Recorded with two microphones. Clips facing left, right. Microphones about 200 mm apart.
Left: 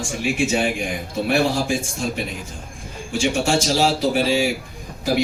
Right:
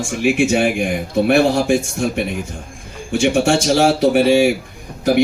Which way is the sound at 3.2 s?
65° right (ahead or behind).